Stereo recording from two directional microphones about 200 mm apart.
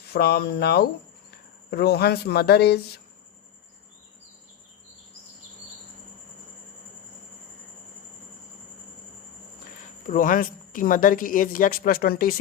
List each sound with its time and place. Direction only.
0.1 s speech: 55° left (ahead or behind)
10.1 s speech: 40° left (ahead or behind)